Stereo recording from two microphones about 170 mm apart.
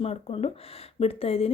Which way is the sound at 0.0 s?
35° left (ahead or behind).